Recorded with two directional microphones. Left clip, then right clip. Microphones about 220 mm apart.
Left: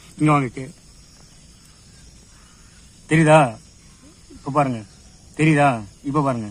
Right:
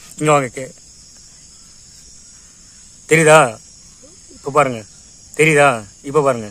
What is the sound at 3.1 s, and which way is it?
Speech, 40° right (ahead or behind).